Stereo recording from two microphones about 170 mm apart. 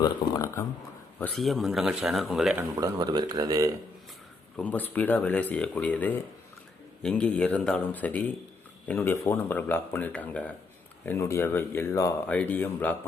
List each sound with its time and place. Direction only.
0.0 s speech: 20° left (ahead or behind)
1.4 s speech: centre (ahead or behind)
2.7 s speech: 20° right (ahead or behind)
4.5 s speech: 10° left (ahead or behind)